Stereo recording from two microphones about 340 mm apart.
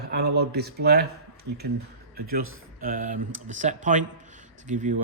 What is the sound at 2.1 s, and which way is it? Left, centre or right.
Speech, right.